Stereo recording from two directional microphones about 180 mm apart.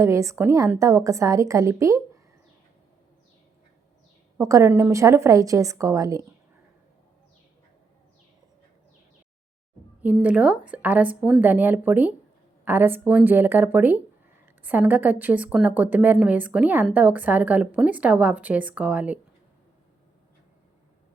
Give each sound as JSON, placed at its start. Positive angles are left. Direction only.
{"t": 0.0, "sound": "a woman's voice", "side_deg": -15}
{"t": 4.4, "sound": "a woman's voice", "side_deg": -15}
{"t": 10.0, "sound": "a woman's voice", "side_deg": -10}